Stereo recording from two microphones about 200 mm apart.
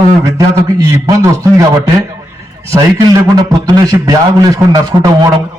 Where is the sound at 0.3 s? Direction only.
15° right (ahead or behind).